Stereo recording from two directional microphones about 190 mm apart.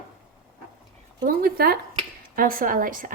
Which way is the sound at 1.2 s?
50° right (ahead or behind).